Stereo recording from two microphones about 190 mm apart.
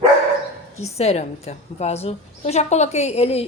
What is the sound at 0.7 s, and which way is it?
A woman's voice, 35° left (ahead or behind).